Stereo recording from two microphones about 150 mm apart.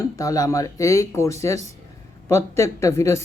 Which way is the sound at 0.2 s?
25° left (ahead or behind).